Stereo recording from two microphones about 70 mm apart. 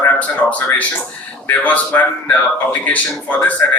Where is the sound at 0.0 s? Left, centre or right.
Left.